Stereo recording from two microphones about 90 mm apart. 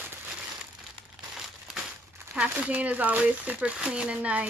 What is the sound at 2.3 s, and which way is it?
Speech, 15° right (ahead or behind).